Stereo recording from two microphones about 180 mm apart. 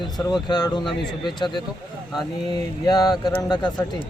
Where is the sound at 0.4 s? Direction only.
20° left (ahead or behind).